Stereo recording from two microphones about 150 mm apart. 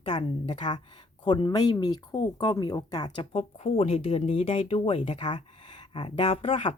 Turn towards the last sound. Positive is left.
turn(degrees=40)  # may be behind; listen again after turning